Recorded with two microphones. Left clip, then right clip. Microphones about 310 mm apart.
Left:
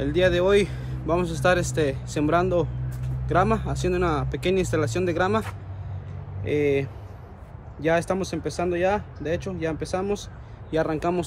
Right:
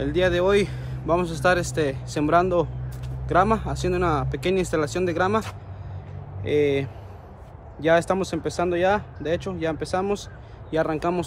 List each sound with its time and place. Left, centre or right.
0.0 s speech: centre